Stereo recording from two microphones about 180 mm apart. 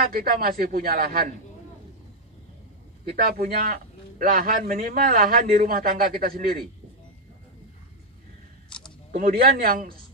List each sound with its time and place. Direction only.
0.1 s a man's voice: 55° right (ahead or behind)
3.2 s a man's voice: 55° right (ahead or behind)
8.6 s a sound: 5° left (ahead or behind)
9.1 s a man's voice: 55° right (ahead or behind)